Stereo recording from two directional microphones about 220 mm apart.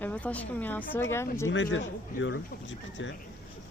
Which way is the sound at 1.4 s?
60° left (ahead or behind).